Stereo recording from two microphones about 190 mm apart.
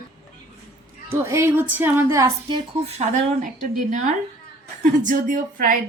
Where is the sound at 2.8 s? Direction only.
35° right (ahead or behind).